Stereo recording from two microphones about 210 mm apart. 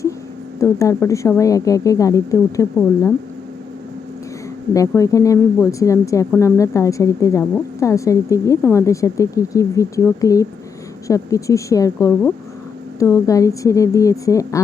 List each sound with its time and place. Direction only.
0.6 s a woman's voice: 15° left (ahead or behind)
4.7 s a woman's voice: 15° left (ahead or behind)